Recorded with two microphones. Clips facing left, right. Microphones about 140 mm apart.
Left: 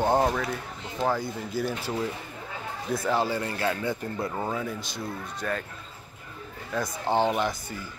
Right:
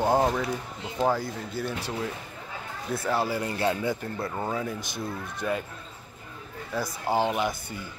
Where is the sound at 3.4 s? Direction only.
20° right (ahead or behind).